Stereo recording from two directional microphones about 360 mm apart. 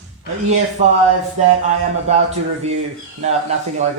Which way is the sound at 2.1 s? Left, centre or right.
Centre.